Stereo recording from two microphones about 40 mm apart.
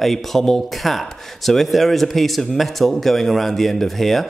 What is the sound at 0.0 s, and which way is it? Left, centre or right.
Speech, centre.